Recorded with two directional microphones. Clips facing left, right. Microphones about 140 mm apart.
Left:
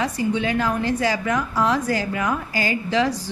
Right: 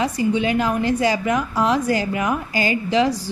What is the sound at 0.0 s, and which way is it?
A woman's voice, 15° right (ahead or behind).